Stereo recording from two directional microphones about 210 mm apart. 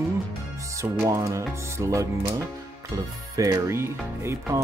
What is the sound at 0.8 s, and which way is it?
Speech, 15° right (ahead or behind).